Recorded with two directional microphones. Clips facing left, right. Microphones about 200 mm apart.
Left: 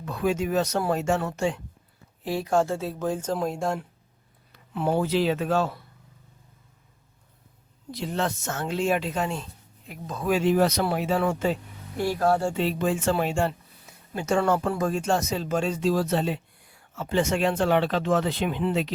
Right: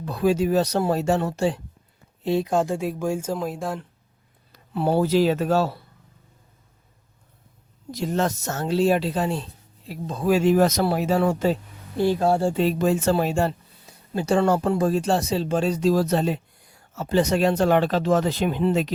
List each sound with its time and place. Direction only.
0.0 s speech: 35° right (ahead or behind)
2.2 s speech: 20° right (ahead or behind); by 3.8 s centre (ahead or behind)
4.5 s speech: 35° right (ahead or behind)
7.9 s speech: 45° right (ahead or behind)
11.9 s speech: 25° right (ahead or behind); by 18.9 s 45° right (ahead or behind)